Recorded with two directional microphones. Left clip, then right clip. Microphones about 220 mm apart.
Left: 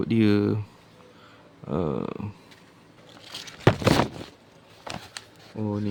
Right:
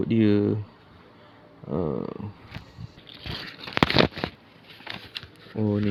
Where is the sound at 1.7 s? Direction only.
20° left (ahead or behind).